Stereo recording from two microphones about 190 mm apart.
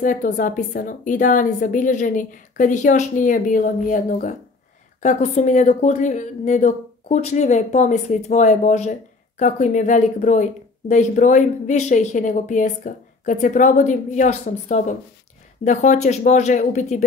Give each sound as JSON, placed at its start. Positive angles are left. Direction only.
{"t": 0.0, "sound": "a woman's voice", "side_deg": 45}